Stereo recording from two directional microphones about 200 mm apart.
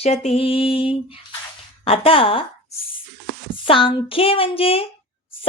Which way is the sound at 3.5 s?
25° left (ahead or behind).